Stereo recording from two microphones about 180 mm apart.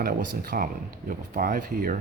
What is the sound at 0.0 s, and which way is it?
Speech, 55° right (ahead or behind).